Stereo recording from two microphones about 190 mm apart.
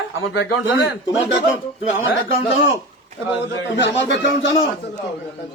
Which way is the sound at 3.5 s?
75° left (ahead or behind).